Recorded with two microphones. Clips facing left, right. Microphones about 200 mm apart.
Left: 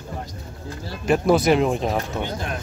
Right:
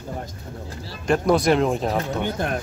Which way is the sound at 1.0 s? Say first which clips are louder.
Left 1 dB; 5° left (ahead or behind).